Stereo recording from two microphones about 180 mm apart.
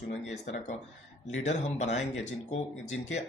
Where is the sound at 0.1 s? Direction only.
40° left (ahead or behind).